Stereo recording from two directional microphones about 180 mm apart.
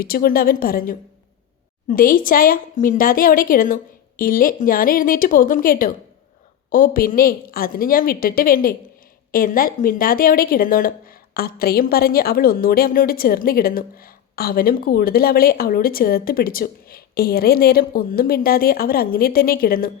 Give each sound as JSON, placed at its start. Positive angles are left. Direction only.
{"t": 0.0, "sound": "a woman's voice", "side_deg": 55}